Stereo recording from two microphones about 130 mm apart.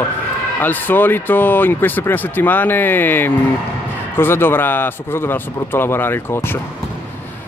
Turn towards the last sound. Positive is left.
turn(degrees=20)  # may be behind; listen again after turning